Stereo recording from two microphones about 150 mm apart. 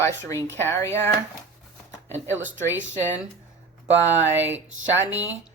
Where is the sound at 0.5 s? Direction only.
15° left (ahead or behind).